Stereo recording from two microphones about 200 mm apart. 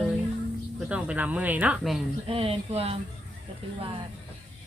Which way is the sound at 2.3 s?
30° right (ahead or behind).